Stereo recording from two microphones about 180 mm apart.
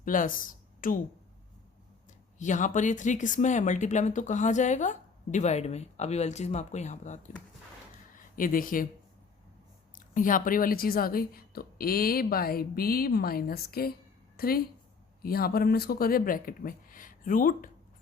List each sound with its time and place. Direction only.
0.0 s a woman's voice: 50° left (ahead or behind)
2.4 s speech: 45° left (ahead or behind)
10.2 s a woman's voice: 50° left (ahead or behind)